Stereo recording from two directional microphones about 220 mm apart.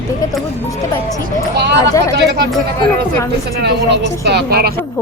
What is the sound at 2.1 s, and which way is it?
Speech, 50° right (ahead or behind).